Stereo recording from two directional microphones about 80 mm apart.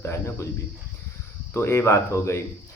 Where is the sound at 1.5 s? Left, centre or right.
Left.